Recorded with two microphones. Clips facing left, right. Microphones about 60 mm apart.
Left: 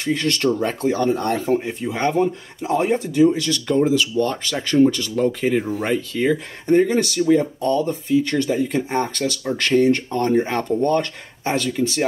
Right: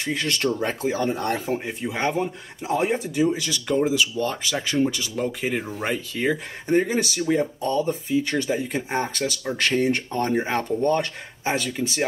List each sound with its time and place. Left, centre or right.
0.0 s speech: centre